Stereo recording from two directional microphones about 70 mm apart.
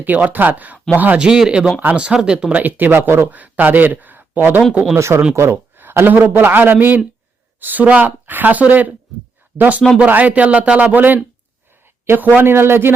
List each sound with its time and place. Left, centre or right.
0.0 s a man's voice: right
1.3 s speech: centre
2.6 s a man's voice: right
3.2 s speech: right
4.9 s a man's voice: right